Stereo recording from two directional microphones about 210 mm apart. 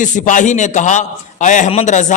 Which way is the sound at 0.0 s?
35° left (ahead or behind).